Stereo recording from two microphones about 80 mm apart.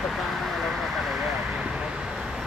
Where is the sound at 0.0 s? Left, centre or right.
Centre.